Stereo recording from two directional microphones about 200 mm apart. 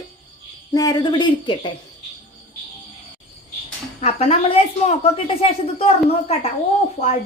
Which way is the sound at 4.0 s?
30° left (ahead or behind).